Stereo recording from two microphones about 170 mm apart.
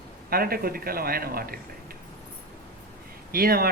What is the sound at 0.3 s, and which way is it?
Speech, 60° right (ahead or behind).